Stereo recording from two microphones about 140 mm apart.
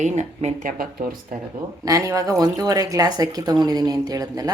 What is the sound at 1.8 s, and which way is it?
A woman's voice, 25° right (ahead or behind).